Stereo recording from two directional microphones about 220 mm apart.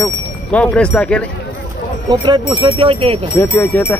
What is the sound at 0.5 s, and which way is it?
Speech, 5° left (ahead or behind).